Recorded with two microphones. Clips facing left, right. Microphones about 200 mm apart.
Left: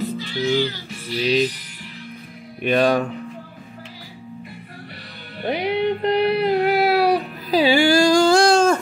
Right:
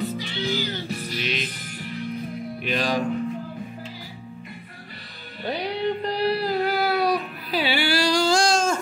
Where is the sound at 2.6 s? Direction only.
55° left (ahead or behind).